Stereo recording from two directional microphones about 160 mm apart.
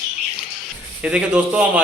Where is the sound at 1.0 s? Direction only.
5° right (ahead or behind).